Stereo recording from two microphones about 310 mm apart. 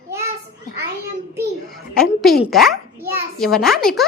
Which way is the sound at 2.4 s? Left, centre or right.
Centre.